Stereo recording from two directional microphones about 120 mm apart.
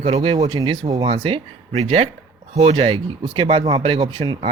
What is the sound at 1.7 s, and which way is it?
Speech, 60° right (ahead or behind).